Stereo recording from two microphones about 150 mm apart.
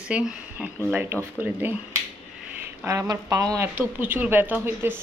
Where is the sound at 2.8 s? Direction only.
20° right (ahead or behind).